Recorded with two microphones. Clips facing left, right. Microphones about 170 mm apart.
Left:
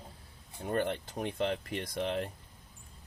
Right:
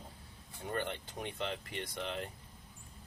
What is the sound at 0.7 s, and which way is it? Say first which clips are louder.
Speech: left 6 dB; 40° left (ahead or behind).